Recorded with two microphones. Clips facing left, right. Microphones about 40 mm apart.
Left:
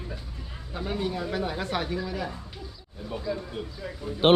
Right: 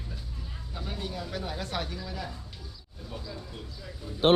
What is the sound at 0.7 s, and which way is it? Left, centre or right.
Speech, left.